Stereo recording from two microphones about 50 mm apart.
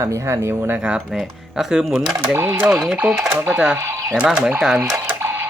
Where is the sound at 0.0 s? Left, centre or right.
Right.